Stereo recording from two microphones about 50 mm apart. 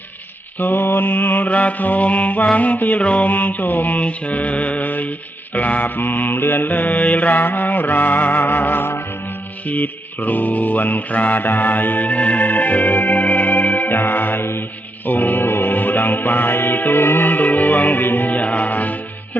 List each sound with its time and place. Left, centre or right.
0.6 s mantra: left
9.6 s music: left
15.0 s music: left